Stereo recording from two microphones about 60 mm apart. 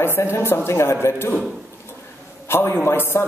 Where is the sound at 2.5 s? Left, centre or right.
Left.